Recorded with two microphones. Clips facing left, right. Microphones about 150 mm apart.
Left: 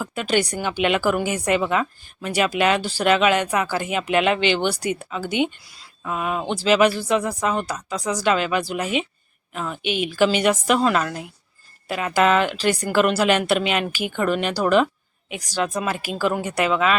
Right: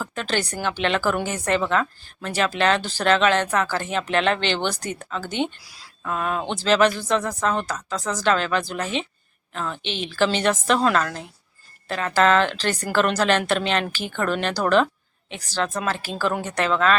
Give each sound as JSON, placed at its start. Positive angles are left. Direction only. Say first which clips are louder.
{"t": 0.0, "sound": "a woman's voice", "louder": "left 4 dB", "side_deg": 10}